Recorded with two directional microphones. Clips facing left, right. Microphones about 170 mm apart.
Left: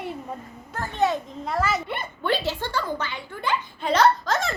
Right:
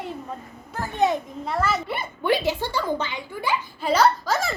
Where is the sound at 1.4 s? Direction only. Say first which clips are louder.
Even; centre (ahead or behind).